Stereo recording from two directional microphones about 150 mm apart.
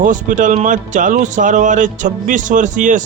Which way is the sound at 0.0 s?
60° right (ahead or behind).